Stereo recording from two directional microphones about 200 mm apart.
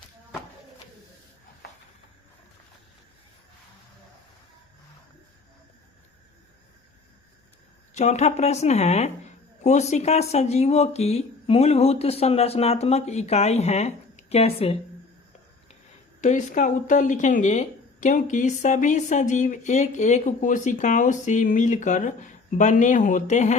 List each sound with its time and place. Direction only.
7.9 s speech: 35° left (ahead or behind)
16.2 s speech: 35° left (ahead or behind)